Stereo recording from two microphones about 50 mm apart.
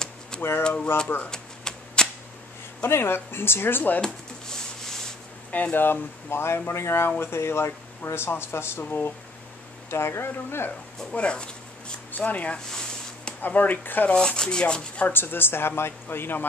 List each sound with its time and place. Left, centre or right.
0.4 s speech: left
1.0 s speech: left
1.3 s a sound: centre
2.8 s speech: left
5.5 s speech: left
5.8 s speech: left
8.8 s speech: left
9.8 s speech: left
11.1 s speech: centre; by 14.1 s left
14.1 s speech: centre
15.0 s speech: left